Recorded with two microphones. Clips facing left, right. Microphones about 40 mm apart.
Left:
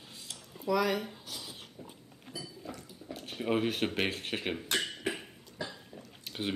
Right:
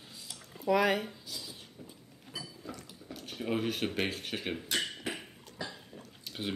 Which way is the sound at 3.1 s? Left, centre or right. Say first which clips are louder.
Left 2 dB; left.